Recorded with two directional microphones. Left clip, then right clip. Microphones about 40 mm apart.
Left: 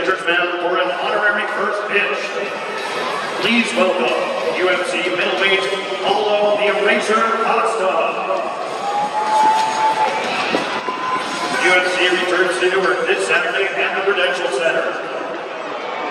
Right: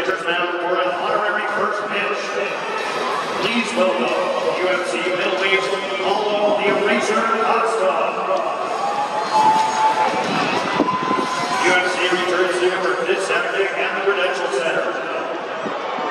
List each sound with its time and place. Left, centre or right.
3.4 s a man's voice: left
5.2 s a man's voice: left
9.3 s run: left
11.6 s a man's voice: left